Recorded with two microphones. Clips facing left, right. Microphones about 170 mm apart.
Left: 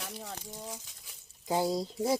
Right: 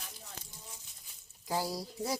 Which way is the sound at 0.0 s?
85° left.